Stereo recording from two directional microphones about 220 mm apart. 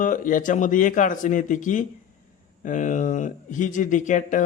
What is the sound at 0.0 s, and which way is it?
A man's voice, 35° left (ahead or behind).